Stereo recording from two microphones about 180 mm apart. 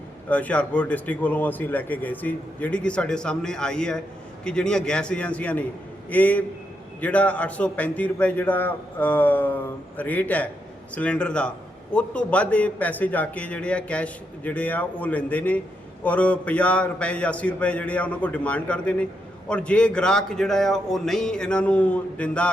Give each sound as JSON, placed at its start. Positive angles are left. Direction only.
{"t": 0.3, "sound": "a man's voice", "side_deg": 10}